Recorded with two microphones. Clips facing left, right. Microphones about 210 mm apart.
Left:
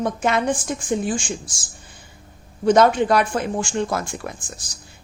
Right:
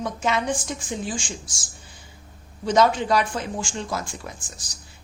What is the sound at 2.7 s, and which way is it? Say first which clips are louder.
A woman's voice: left 4 dB; 55° left (ahead or behind).